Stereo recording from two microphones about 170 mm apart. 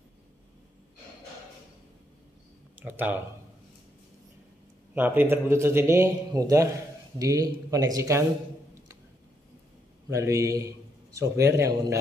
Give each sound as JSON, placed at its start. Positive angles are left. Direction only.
{"t": 2.8, "sound": "a man's voice", "side_deg": -10}
{"t": 4.9, "sound": "a man's voice", "side_deg": -10}
{"t": 10.0, "sound": "a man's voice", "side_deg": -15}